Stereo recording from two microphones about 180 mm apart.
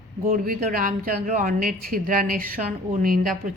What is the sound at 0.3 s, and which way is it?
Speech, 55° right (ahead or behind).